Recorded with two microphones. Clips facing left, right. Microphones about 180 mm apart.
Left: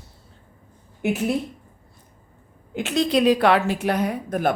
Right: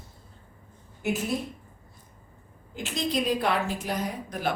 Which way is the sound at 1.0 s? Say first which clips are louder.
Left 5 dB; 60° left (ahead or behind).